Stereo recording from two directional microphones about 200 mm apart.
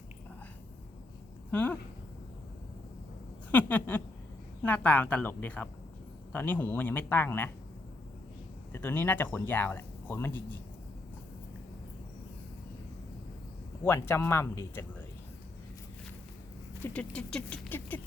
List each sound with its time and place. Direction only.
1.5 s speech: 5° left (ahead or behind)
3.5 s speech: 10° left (ahead or behind)
8.7 s speech: 10° left (ahead or behind)
13.8 s speech: 10° left (ahead or behind)
16.8 s speech: 5° left (ahead or behind)